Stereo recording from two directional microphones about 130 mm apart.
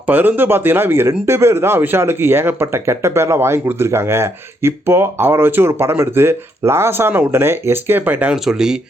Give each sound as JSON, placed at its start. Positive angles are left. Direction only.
{"t": 0.1, "sound": "speech", "side_deg": -15}